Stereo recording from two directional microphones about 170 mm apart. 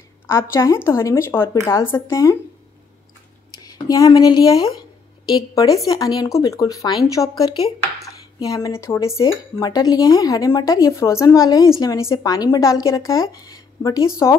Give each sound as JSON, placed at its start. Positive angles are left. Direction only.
{"t": 0.3, "sound": "speech", "side_deg": 15}
{"t": 3.7, "sound": "speech", "side_deg": 20}